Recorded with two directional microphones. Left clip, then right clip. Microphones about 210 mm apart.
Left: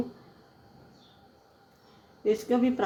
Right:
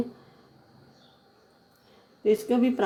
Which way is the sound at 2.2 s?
30° right (ahead or behind).